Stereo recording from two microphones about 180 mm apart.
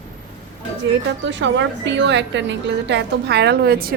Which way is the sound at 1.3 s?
80° right.